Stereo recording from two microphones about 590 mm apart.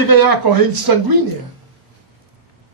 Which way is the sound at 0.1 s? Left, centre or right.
Right.